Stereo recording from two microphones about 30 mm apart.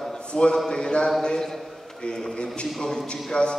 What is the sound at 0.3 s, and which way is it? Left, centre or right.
A man's voice, left.